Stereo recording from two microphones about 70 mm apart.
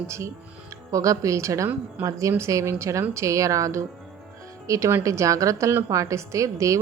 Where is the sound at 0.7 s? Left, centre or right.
Right.